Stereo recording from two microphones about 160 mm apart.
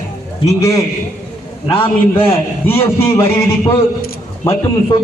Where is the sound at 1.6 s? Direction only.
35° left (ahead or behind).